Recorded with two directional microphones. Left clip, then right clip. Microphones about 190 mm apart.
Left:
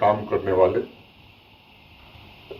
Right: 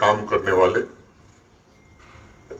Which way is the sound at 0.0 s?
20° right (ahead or behind).